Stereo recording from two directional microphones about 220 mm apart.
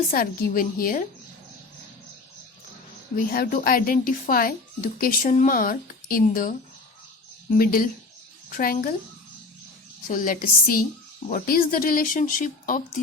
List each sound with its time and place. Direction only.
0.1 s speech: 40° left (ahead or behind)
3.2 s speech: 40° left (ahead or behind)
10.1 s speech: 40° left (ahead or behind)